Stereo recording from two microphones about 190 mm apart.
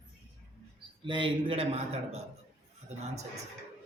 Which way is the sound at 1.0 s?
25° right (ahead or behind).